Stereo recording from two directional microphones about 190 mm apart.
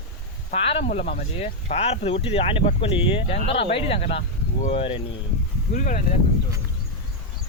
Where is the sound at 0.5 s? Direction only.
30° left (ahead or behind).